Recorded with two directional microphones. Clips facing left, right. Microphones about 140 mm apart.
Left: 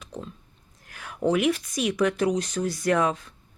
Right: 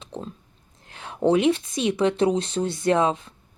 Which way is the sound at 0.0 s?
30° right (ahead or behind).